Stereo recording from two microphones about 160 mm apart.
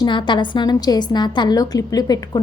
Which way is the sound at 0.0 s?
30° left (ahead or behind).